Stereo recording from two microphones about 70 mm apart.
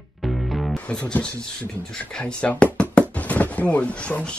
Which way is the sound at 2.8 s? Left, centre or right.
Centre.